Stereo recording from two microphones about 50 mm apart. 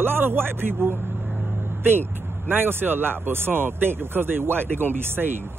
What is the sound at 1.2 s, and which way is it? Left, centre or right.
Vehicle, centre.